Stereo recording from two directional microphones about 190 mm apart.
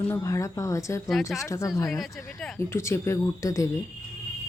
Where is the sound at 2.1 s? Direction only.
15° left (ahead or behind).